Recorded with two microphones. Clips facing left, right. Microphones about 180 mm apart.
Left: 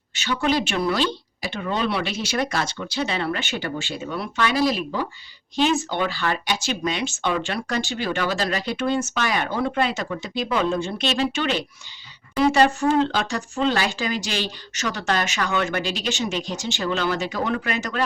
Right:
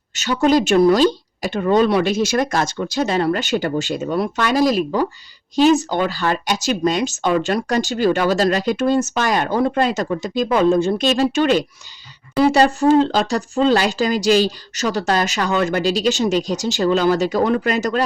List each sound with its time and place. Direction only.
0.1 s speech: 40° right (ahead or behind)